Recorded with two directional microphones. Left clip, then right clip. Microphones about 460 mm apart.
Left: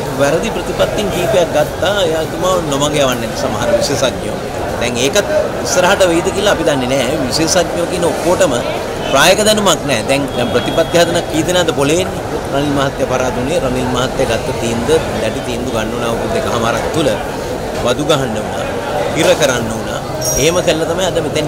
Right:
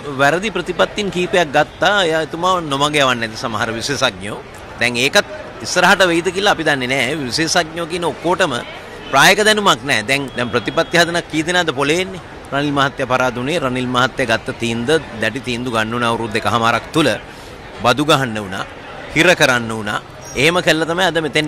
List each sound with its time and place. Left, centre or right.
0.2 s a man's voice: right